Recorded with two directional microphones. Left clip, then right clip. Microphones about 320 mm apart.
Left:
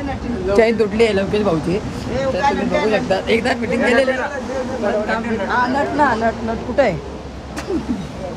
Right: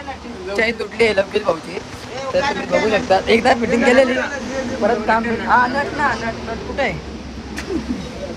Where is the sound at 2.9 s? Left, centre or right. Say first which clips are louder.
Right 4 dB; centre.